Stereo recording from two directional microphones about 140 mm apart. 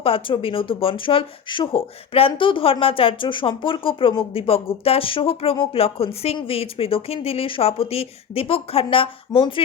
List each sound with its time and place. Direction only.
0.0 s speech: 40° left (ahead or behind)